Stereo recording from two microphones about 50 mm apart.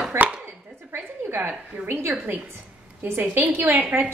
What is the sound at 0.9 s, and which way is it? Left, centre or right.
A woman's voice, right.